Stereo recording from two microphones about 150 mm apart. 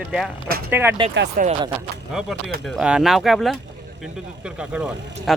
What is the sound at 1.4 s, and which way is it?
Speech, 70° right (ahead or behind).